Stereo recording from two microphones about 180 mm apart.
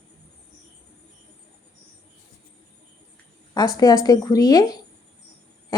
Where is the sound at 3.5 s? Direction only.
20° left (ahead or behind).